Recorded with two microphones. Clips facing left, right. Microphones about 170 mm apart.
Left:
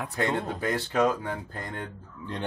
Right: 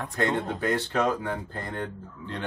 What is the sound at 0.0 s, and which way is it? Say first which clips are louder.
Speech: right 1 dB; 10° left (ahead or behind).